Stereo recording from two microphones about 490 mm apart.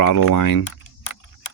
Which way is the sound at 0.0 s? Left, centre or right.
Left.